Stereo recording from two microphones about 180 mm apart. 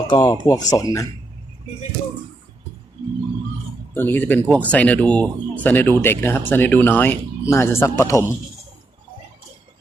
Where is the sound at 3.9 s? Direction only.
10° left (ahead or behind).